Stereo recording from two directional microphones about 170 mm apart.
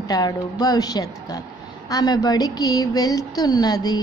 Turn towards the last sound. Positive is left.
turn(degrees=25)  # may be behind; listen again after turning